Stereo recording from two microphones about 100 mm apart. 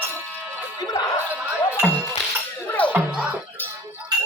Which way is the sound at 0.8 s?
40° left (ahead or behind).